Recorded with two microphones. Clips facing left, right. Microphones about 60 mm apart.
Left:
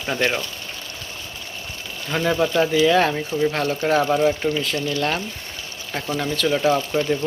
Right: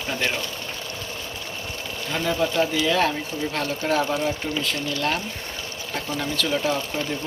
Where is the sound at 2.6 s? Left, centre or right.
Centre.